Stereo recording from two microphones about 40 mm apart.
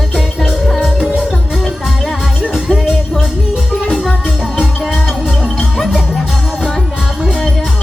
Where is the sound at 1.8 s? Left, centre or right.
Centre.